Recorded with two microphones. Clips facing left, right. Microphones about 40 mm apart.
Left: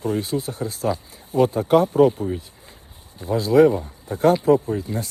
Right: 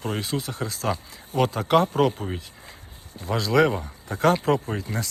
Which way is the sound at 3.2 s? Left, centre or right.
Right.